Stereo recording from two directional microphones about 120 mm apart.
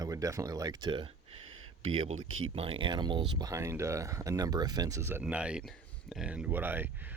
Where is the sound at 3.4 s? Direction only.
25° right (ahead or behind).